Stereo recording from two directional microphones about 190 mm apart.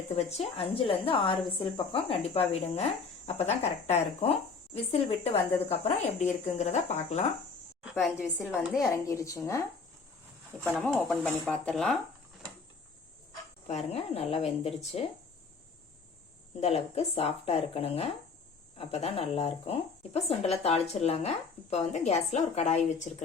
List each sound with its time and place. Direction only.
0.2 s a woman's voice: 35° left (ahead or behind)
8.2 s speech: 15° left (ahead or behind)
13.7 s a woman's voice: 35° left (ahead or behind)
14.7 s speech: centre (ahead or behind)
16.6 s a woman's voice: 35° left (ahead or behind)